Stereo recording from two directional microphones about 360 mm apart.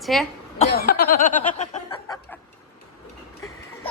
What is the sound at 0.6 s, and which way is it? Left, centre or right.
Snicker, left.